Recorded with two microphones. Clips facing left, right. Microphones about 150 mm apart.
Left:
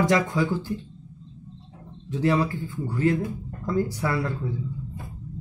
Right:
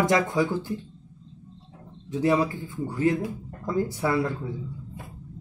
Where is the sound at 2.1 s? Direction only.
20° right (ahead or behind).